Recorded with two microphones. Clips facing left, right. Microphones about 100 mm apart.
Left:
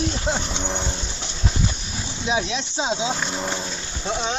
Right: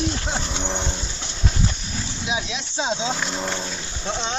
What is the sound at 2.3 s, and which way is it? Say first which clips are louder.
Speech: left 5 dB; 35° left (ahead or behind).